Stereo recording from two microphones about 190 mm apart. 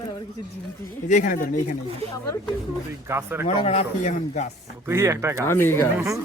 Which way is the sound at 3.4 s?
35° left (ahead or behind).